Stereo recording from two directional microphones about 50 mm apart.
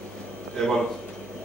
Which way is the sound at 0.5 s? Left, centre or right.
Centre.